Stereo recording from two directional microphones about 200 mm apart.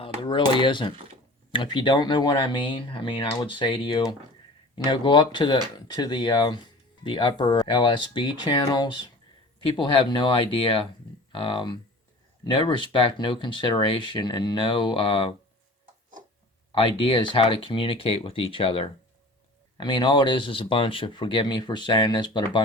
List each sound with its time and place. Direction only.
0.0 s speech: 25° left (ahead or behind)
16.7 s speech: 25° left (ahead or behind)